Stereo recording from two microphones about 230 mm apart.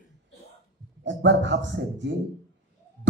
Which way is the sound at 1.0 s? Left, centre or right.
Right.